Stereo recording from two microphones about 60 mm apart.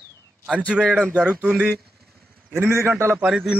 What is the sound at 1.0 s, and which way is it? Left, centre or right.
Speech, centre.